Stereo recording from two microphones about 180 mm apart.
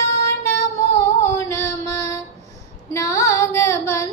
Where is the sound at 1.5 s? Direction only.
15° left (ahead or behind).